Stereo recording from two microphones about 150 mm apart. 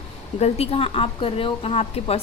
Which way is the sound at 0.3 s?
45° left (ahead or behind).